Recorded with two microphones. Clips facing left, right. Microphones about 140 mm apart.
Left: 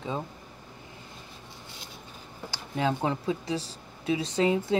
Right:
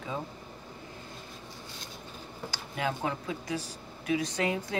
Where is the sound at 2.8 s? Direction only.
25° left (ahead or behind).